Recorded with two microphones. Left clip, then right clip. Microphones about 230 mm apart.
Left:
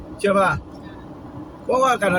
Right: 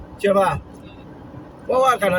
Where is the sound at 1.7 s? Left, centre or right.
Centre.